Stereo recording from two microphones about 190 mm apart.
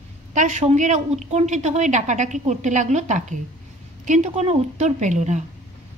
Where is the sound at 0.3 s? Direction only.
40° right (ahead or behind).